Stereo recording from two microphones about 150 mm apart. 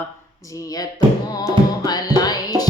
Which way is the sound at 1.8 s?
25° left (ahead or behind).